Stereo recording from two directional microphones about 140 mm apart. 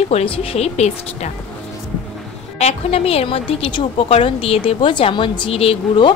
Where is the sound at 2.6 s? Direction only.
45° left (ahead or behind).